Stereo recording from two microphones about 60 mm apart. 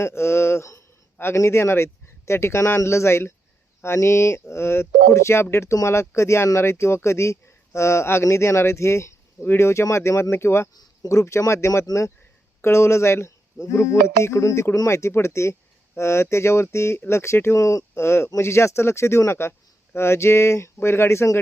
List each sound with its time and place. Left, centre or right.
0.0 s speech: left
11.1 s speech: left
17.6 s speech: left